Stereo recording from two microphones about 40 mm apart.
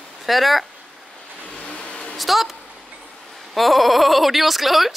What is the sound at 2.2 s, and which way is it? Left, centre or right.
Speech, centre.